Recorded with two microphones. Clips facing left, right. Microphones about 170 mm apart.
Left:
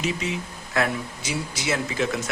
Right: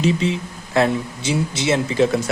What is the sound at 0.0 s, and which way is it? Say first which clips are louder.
Speech: right 8 dB; 30° right (ahead or behind).